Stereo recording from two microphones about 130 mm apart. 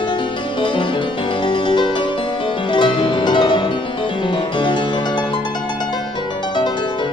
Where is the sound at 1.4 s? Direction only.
40° left (ahead or behind).